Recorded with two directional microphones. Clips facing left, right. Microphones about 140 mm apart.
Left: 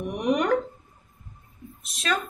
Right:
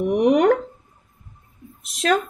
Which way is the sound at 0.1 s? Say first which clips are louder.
Right 7 dB; 90° right.